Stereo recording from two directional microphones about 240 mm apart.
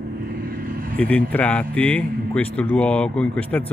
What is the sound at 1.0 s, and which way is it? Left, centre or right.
Speech, centre.